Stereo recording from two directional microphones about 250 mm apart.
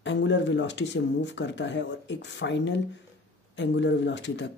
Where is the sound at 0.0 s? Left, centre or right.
Left.